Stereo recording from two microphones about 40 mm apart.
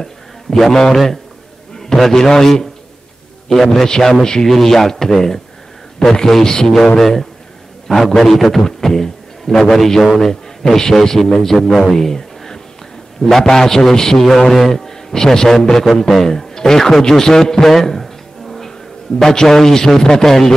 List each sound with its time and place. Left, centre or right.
0.0 s a man's voice: centre